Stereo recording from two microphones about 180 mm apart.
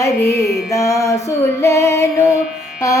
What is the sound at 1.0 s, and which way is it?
Music, 15° left (ahead or behind).